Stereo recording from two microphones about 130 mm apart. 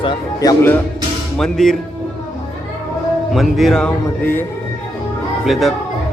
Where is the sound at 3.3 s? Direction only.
Centre (ahead or behind).